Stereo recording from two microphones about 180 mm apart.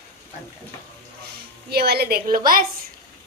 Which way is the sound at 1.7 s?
60° right (ahead or behind).